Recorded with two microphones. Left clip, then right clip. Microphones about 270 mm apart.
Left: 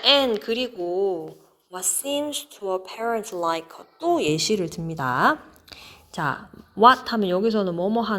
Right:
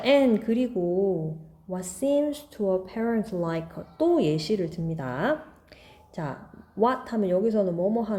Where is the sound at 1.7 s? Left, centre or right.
Centre.